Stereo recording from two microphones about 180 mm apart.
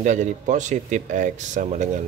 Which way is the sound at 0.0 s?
45° right (ahead or behind).